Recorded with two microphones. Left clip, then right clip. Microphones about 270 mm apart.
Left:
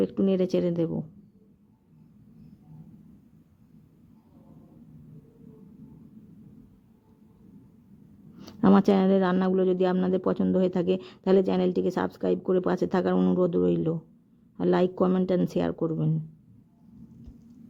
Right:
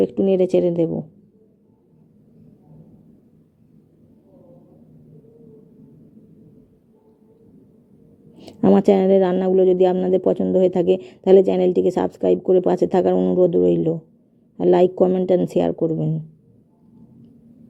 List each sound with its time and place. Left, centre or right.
0.0 s speech: centre
8.4 s speech: centre